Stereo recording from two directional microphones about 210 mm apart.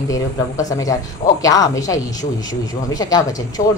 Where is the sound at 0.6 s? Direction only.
15° left (ahead or behind).